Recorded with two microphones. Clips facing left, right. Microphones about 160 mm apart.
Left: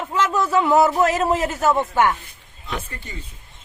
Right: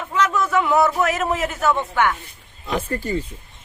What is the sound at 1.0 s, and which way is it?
Speech, 30° left (ahead or behind).